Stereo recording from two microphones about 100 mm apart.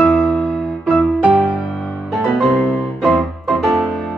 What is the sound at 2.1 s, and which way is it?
Music, centre (ahead or behind).